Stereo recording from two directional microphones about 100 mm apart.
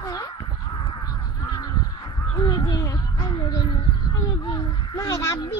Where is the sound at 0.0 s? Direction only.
35° left (ahead or behind).